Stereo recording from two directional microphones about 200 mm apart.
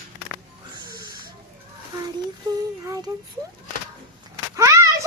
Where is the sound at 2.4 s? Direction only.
15° right (ahead or behind).